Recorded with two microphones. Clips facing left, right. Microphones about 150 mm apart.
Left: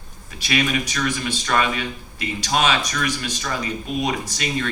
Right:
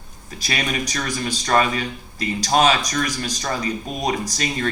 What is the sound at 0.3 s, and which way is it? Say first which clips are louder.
Speech: left 3 dB; 40° right (ahead or behind).